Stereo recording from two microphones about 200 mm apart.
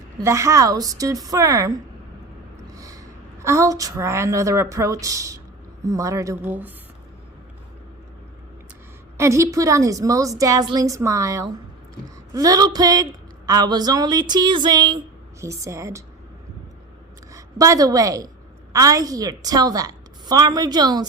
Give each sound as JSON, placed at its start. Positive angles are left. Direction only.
{"t": 0.2, "sound": "a woman's voice", "side_deg": -15}
{"t": 9.1, "sound": "a woman's voice", "side_deg": -15}
{"t": 17.3, "sound": "a woman's voice", "side_deg": -15}